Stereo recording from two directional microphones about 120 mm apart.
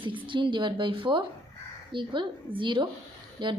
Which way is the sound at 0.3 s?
45° right (ahead or behind).